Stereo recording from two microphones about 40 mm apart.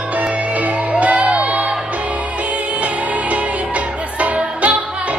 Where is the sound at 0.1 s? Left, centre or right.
Right.